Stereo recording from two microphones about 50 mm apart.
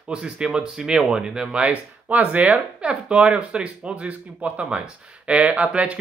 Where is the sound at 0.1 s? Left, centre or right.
Centre.